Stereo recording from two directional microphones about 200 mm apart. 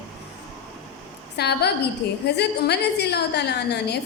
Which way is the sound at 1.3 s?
55° left (ahead or behind).